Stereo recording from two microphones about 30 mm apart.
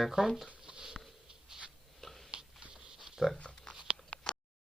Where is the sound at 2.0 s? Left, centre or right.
Centre.